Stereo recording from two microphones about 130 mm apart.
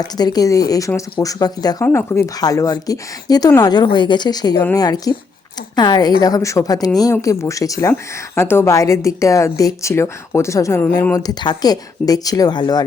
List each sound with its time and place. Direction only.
0.0 s a woman's voice: 30° left (ahead or behind)
1.8 s a woman's voice: 20° left (ahead or behind)
11.1 s a woman's voice: 30° left (ahead or behind)